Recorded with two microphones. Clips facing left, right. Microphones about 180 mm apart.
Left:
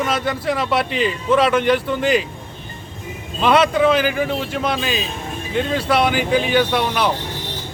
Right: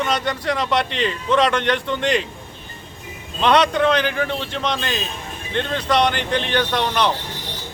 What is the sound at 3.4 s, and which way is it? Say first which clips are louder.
Speech: left 2 dB; 5° left (ahead or behind).